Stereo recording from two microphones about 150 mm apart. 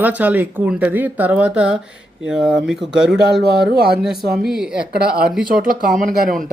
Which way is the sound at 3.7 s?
90° right.